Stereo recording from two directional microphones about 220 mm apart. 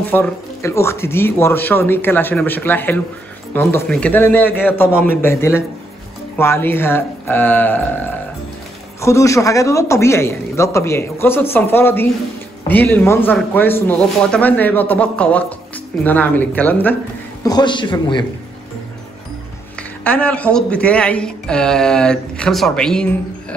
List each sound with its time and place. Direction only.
0.1 s speech: 10° left (ahead or behind)
17.4 s a man's voice: 20° left (ahead or behind)
20.0 s speech: 5° left (ahead or behind)